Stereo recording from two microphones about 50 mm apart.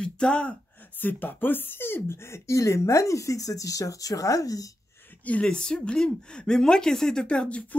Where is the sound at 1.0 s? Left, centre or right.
Left.